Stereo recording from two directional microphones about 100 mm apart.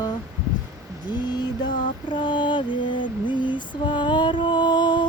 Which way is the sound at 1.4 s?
50° left (ahead or behind).